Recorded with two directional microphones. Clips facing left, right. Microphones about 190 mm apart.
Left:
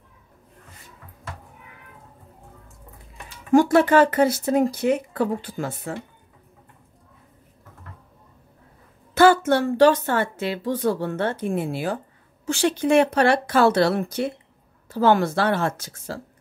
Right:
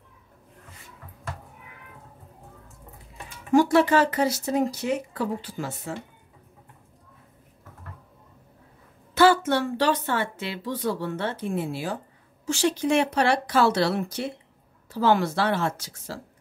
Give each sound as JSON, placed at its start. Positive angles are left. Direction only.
{"t": 3.5, "sound": "speech", "side_deg": 50}
{"t": 9.1, "sound": "a woman's voice", "side_deg": 50}